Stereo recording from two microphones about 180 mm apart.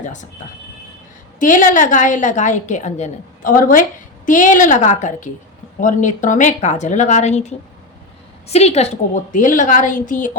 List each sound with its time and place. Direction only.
0.0 s speech: 45° left (ahead or behind)
1.4 s a woman's voice: 45° left (ahead or behind)